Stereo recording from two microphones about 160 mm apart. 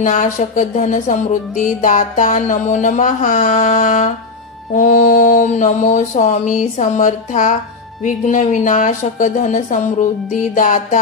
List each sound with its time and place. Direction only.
0.0 s music: 50° left (ahead or behind)